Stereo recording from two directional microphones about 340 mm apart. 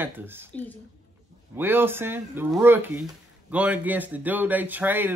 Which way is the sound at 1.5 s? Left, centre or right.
Centre.